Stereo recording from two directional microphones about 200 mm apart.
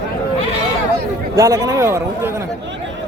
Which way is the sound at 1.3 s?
15° right (ahead or behind).